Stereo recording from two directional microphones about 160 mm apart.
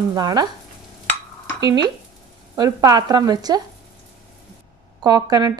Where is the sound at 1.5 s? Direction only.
25° right (ahead or behind).